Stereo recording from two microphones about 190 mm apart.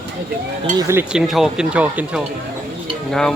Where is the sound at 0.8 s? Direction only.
15° right (ahead or behind); by 3.3 s 5° left (ahead or behind).